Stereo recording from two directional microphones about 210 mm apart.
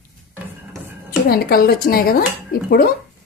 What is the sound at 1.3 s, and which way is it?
Speech, 45° left (ahead or behind).